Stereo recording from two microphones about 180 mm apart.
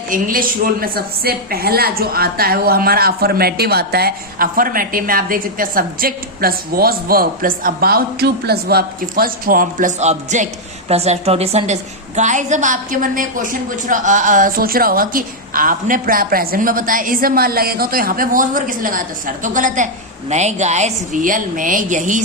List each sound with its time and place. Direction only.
0.1 s a woman's voice: 50° right (ahead or behind)